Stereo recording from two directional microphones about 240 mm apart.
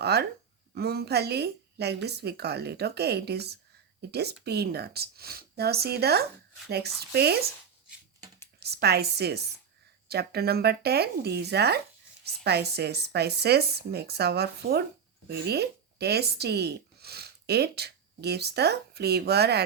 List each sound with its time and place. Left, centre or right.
0.0 s speech: right
8.5 s speech: right